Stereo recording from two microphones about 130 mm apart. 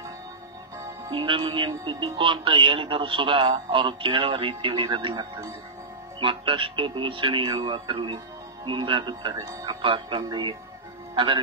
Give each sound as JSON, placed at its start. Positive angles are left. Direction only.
{"t": 1.1, "sound": "speech", "side_deg": -40}
{"t": 6.2, "sound": "speech", "side_deg": -40}
{"t": 9.5, "sound": "speech", "side_deg": -25}
{"t": 9.8, "sound": "speech", "side_deg": -40}